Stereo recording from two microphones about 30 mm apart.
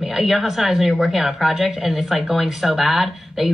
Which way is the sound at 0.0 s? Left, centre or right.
Centre.